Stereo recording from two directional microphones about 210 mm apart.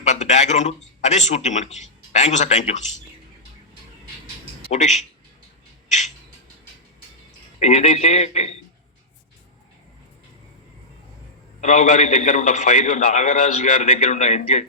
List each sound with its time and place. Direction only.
0.0 s speech: 35° left (ahead or behind)
4.7 s a man's voice: 35° left (ahead or behind)
7.6 s a man's voice: 30° left (ahead or behind)
11.6 s a man's voice: 35° left (ahead or behind)